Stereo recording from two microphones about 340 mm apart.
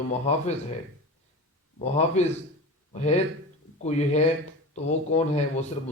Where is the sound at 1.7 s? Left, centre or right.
Centre.